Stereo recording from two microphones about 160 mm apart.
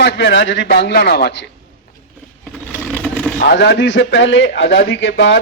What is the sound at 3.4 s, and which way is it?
A man's voice, 80° left.